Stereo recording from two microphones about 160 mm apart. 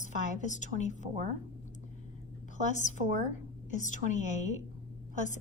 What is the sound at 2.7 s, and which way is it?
Speech, 50° left (ahead or behind).